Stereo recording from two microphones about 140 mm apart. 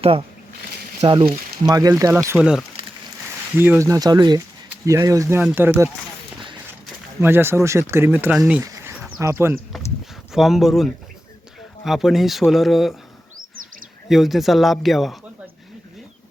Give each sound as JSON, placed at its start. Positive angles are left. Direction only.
{"t": 0.0, "sound": "speech", "side_deg": -40}
{"t": 1.6, "sound": "speech", "side_deg": -25}
{"t": 3.5, "sound": "speech", "side_deg": -15}
{"t": 7.2, "sound": "speech", "side_deg": -15}
{"t": 8.6, "sound": "a sound", "side_deg": -20}
{"t": 9.1, "sound": "speech", "side_deg": -20}
{"t": 10.3, "sound": "speech", "side_deg": 0}
{"t": 14.1, "sound": "speech", "side_deg": 0}